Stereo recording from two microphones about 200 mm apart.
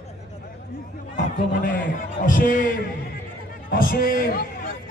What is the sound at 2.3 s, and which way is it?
Speech, 45° left (ahead or behind).